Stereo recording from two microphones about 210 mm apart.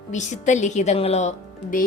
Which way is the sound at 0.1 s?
35° left (ahead or behind).